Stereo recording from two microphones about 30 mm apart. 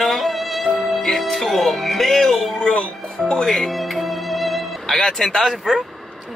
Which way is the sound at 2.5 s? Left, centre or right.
Left.